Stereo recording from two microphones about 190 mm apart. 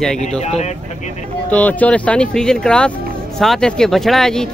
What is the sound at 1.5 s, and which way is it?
Speech, 10° left (ahead or behind).